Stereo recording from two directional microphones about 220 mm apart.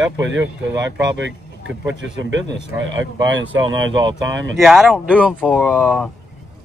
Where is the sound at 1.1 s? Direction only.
55° right (ahead or behind).